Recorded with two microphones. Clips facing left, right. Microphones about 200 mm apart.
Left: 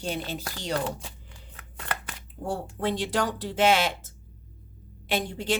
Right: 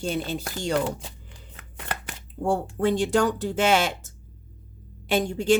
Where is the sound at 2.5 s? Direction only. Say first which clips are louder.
Right 6 dB; 45° right (ahead or behind).